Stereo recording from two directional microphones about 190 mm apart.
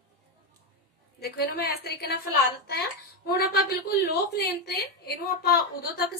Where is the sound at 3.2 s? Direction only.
55° left (ahead or behind).